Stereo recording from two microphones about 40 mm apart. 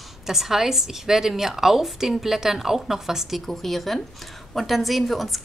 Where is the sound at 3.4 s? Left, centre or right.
Centre.